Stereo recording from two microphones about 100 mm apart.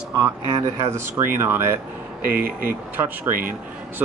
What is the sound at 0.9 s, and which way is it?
Speech, 25° right (ahead or behind).